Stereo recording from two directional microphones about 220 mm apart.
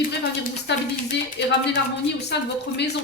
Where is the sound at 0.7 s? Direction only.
50° left (ahead or behind).